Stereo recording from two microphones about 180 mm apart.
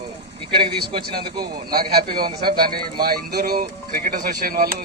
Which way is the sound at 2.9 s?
55° right (ahead or behind).